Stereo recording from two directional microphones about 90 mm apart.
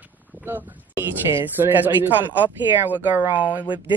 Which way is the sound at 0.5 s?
25° right (ahead or behind).